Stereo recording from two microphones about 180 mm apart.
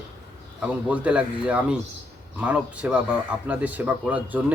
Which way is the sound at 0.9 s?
5° right (ahead or behind).